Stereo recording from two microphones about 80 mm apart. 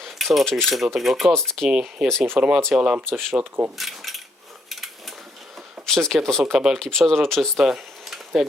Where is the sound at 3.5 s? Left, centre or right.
Right.